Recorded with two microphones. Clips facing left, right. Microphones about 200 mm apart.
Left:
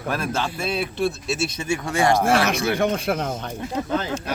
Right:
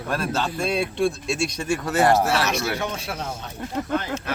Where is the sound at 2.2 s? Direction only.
55° left (ahead or behind).